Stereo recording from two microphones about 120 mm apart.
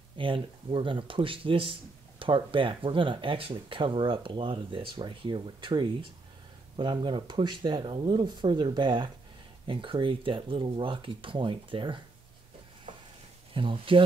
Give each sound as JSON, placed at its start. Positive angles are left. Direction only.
{"t": 0.2, "sound": "speech", "side_deg": -45}
{"t": 13.5, "sound": "speech", "side_deg": -45}